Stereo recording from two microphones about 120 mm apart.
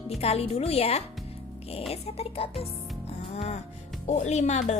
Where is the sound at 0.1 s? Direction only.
60° left (ahead or behind).